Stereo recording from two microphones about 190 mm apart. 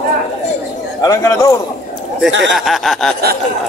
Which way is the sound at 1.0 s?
15° left (ahead or behind).